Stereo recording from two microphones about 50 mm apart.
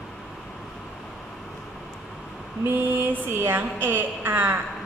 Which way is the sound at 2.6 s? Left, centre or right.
Right.